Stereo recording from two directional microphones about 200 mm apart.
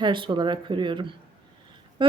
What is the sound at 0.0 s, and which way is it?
Speech, 25° right (ahead or behind).